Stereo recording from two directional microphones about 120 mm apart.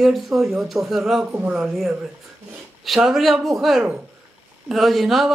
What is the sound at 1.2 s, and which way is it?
Speech, 15° right (ahead or behind).